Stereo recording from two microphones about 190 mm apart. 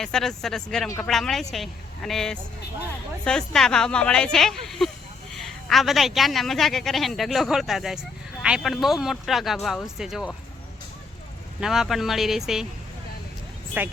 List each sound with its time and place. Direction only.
0.0 s a woman's voice: centre (ahead or behind)
11.6 s a woman's voice: centre (ahead or behind)